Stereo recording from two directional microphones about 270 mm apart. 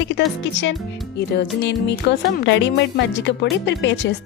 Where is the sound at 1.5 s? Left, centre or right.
Left.